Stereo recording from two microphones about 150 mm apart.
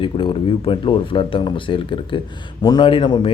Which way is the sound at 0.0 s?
35° left (ahead or behind).